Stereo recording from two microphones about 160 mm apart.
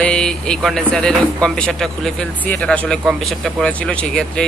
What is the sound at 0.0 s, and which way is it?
Speech, 5° left (ahead or behind).